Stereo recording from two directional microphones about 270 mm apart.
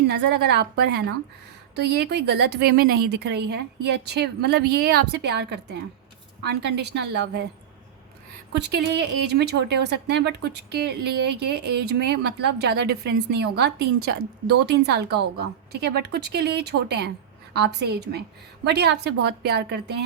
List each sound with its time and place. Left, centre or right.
0.1 s a woman's voice: right
8.5 s a woman's voice: right